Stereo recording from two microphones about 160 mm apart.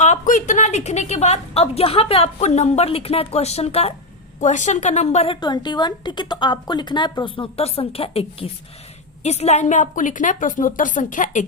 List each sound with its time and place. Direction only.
0.0 s a woman's voice: 50° left (ahead or behind)
5.4 s a woman's voice: 25° left (ahead or behind); by 11.4 s 55° left (ahead or behind)